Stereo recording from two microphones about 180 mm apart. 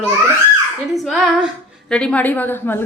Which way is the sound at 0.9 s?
Centre (ahead or behind).